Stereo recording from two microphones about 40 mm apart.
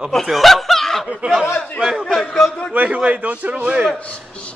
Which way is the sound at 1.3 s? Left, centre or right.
Centre.